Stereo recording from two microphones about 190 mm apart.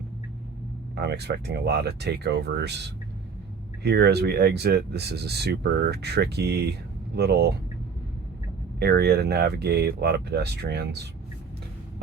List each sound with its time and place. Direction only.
0.9 s speech: 60° right (ahead or behind)
3.8 s speech: 60° right (ahead or behind)
8.8 s speech: 55° right (ahead or behind)